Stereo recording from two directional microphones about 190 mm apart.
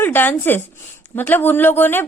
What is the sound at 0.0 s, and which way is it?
A woman's voice, 10° left (ahead or behind).